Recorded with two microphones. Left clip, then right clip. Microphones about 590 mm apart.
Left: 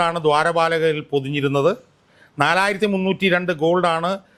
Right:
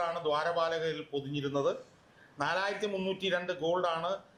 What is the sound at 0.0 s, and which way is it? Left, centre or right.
A man's voice, left.